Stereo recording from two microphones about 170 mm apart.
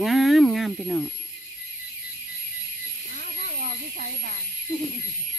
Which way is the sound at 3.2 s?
65° right (ahead or behind).